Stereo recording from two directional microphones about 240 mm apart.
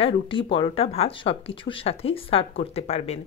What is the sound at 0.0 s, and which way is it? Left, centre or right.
Speech, left.